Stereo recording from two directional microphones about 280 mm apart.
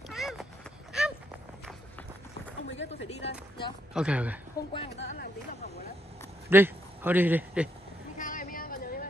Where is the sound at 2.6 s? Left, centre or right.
Left.